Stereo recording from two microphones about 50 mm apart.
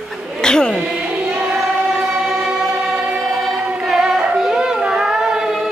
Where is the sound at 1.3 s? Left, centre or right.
Centre.